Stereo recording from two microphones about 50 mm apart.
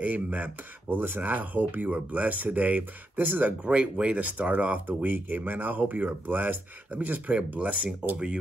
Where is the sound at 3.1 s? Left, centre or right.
Right.